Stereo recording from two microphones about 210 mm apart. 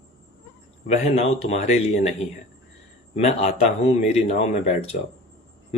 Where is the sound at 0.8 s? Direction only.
30° left (ahead or behind).